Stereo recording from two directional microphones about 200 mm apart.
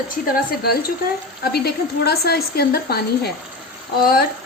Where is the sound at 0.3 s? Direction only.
50° left (ahead or behind).